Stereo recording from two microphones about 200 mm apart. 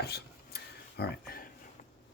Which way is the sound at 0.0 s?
55° left (ahead or behind).